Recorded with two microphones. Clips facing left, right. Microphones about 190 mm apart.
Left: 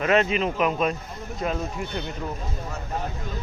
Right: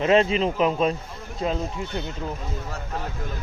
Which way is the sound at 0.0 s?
30° right (ahead or behind).